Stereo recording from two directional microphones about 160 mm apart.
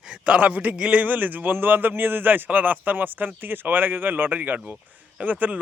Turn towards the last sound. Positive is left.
turn(degrees=-10)  # may be behind; listen again after turning